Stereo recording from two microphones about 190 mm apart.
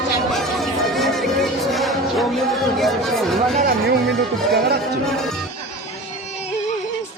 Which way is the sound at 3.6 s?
55° right (ahead or behind).